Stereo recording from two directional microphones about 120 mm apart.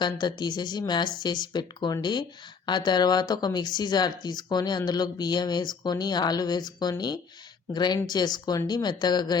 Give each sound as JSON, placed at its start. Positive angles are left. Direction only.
{"t": 0.0, "sound": "speech", "side_deg": 40}